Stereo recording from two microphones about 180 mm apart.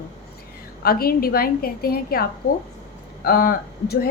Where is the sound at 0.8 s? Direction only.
55° left (ahead or behind).